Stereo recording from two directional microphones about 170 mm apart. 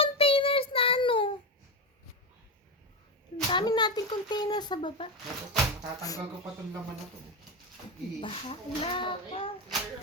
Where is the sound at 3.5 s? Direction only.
25° left (ahead or behind).